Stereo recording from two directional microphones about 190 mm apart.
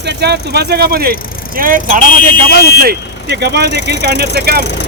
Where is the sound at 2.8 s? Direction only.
60° right (ahead or behind).